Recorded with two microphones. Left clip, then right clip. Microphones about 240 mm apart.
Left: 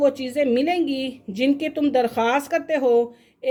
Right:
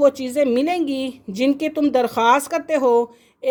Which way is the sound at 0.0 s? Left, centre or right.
Right.